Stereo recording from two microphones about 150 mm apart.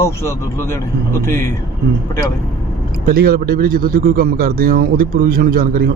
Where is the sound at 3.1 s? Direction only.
80° right.